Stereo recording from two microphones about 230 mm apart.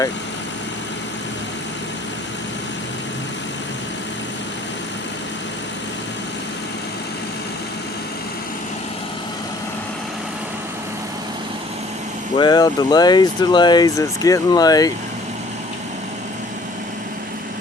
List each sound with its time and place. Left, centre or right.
12.4 s speech: centre